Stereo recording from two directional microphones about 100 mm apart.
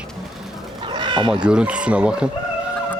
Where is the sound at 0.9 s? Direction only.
50° right (ahead or behind).